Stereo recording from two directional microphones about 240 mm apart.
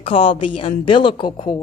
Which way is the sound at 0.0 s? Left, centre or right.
Left.